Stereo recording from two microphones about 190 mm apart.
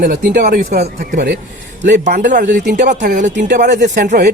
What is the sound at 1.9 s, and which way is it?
Speech, 40° right (ahead or behind).